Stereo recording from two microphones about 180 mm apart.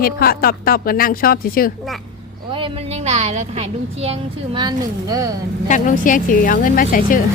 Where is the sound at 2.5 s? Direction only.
30° right (ahead or behind).